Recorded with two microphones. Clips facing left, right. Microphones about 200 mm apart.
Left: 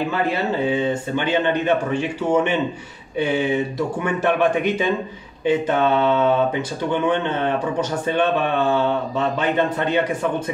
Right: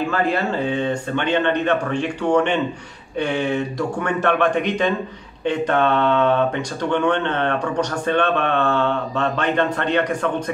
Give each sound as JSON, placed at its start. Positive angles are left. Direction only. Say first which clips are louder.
{"t": 0.1, "sound": "speech", "louder": "right 1 dB", "side_deg": 5}